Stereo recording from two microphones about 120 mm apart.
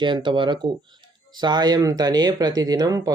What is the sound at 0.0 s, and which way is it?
Speech, 40° right (ahead or behind).